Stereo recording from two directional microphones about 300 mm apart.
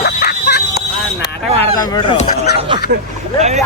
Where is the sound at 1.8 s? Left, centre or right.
Centre.